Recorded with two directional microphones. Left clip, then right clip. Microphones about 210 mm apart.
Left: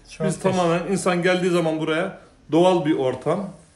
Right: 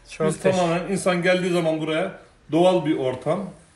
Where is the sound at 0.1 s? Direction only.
10° left (ahead or behind).